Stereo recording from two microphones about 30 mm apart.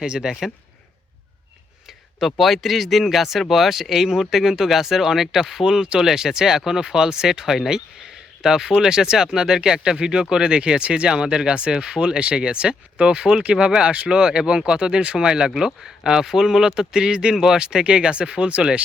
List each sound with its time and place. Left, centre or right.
0.0 s a man's voice: right
2.2 s speech: centre
5.6 s a man's voice: right
6.0 s a man's voice: centre
7.7 s a sound: right
8.4 s a man's voice: centre
17.3 s speech: centre
17.6 s speech: right